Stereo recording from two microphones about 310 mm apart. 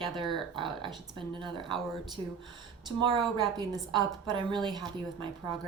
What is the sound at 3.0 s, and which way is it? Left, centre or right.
A woman's voice, centre.